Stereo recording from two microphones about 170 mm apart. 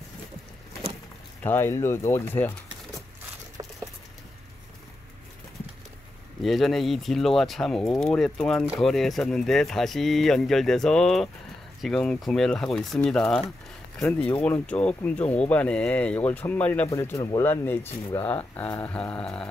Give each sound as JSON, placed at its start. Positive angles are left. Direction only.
{"t": 1.4, "sound": "speech", "side_deg": 15}
{"t": 3.6, "sound": "patter", "side_deg": -25}
{"t": 6.4, "sound": "speech", "side_deg": 0}